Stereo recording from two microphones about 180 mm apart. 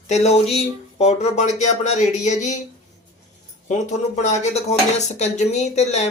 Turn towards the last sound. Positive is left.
turn(degrees=40)  # may be behind; listen again after turning